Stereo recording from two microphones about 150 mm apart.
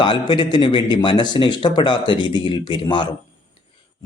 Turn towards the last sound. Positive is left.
turn(degrees=30)  # may be behind; listen again after turning